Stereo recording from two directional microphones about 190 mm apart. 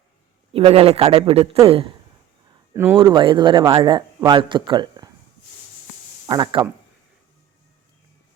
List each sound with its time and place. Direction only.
0.5 s a man's voice: 30° right (ahead or behind)
2.7 s speech: 10° right (ahead or behind)
3.0 s speech: 25° right (ahead or behind)
6.2 s speech: 25° right (ahead or behind)